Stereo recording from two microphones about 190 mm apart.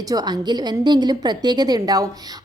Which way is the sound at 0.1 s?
20° right (ahead or behind).